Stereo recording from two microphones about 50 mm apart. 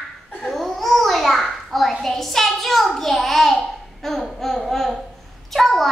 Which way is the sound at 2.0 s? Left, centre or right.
Centre.